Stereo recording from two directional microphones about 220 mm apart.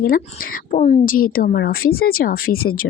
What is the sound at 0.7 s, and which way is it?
Speech, 35° left (ahead or behind).